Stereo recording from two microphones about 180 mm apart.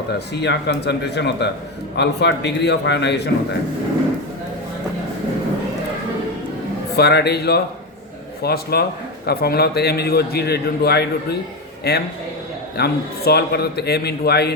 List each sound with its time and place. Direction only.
0.3 s a man's voice: 70° left (ahead or behind)
6.9 s a man's voice: 65° left (ahead or behind)